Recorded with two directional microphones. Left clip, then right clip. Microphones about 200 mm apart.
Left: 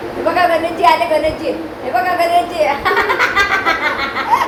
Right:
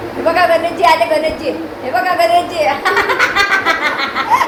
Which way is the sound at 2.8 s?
35° right (ahead or behind).